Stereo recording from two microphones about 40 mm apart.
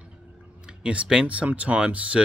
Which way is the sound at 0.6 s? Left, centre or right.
Right.